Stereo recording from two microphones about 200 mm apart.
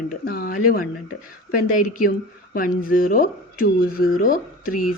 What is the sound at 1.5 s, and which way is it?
Speech, 40° left (ahead or behind).